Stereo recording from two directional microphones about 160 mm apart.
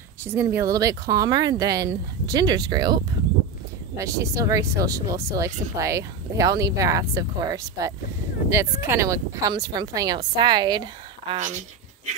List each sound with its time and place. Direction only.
0.2 s speech: 15° right (ahead or behind)
11.3 s speech: 50° right (ahead or behind)